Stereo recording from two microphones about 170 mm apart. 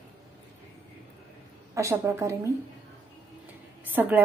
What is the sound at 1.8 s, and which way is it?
Speech, 15° right (ahead or behind).